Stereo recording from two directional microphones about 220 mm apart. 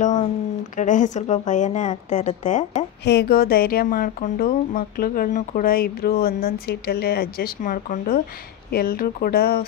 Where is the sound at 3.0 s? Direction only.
45° left (ahead or behind).